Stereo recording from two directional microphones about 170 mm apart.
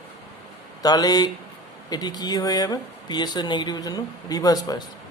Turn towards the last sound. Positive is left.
turn(degrees=20)  # may be behind; listen again after turning